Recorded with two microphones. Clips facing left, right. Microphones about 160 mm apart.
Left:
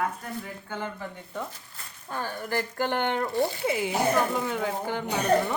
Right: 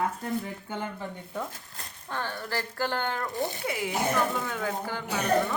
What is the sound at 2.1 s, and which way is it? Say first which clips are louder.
Speech: left 2 dB; 10° left (ahead or behind).